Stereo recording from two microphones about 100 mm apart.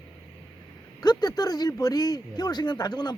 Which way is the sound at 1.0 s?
45° left (ahead or behind).